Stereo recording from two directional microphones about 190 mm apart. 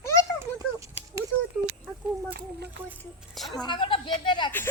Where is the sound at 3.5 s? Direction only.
25° left (ahead or behind).